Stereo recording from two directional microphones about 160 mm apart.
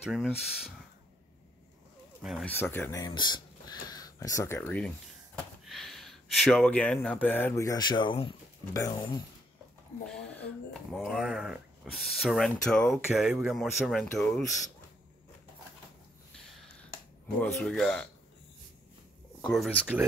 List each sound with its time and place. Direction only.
0.1 s speech: centre (ahead or behind)
2.4 s speech: 10° left (ahead or behind)
3.1 s speech: 30° left (ahead or behind)
10.0 s speech: 5° left (ahead or behind)
17.4 s speech: 5° left (ahead or behind)
19.4 s speech: centre (ahead or behind)